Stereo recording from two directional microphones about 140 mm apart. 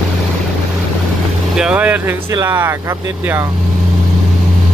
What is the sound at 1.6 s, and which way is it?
Vehicle, 10° right (ahead or behind).